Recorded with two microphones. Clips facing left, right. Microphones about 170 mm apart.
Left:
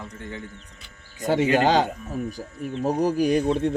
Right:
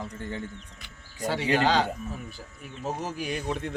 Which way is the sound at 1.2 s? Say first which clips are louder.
Left 5 dB; 45° left (ahead or behind).